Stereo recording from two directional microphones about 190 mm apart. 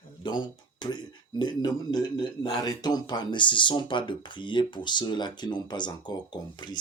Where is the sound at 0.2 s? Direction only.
25° left (ahead or behind).